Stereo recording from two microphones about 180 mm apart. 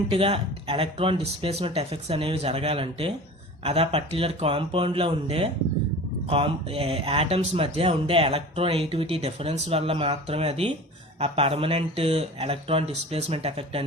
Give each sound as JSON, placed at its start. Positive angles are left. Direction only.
{"t": 0.1, "sound": "speech", "side_deg": -30}